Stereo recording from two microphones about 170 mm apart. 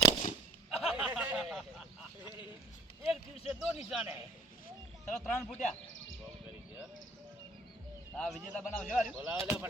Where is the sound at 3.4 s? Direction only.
Centre (ahead or behind).